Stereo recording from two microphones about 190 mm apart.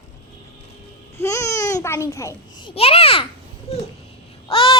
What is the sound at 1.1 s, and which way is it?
Speech, 15° left (ahead or behind).